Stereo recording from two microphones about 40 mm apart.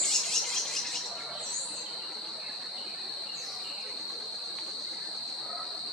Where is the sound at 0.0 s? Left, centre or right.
Centre.